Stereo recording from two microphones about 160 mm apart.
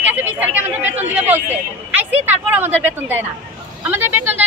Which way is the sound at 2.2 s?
10° right (ahead or behind).